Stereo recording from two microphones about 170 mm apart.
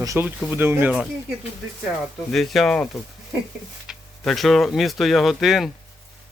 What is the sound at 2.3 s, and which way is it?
Speech, centre (ahead or behind).